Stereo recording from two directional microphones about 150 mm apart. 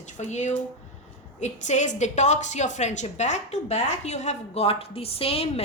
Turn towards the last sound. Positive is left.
turn(degrees=40)  # may be behind; listen again after turning